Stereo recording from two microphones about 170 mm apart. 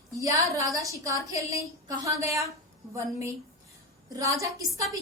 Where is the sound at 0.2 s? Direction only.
20° right (ahead or behind).